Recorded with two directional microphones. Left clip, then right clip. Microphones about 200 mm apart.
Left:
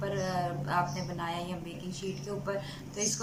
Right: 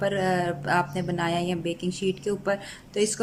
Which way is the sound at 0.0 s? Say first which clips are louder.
Right 8 dB; 50° right (ahead or behind).